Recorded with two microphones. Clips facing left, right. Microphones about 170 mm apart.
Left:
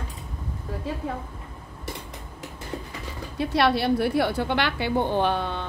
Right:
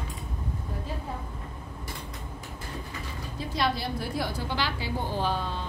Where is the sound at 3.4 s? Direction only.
70° left (ahead or behind).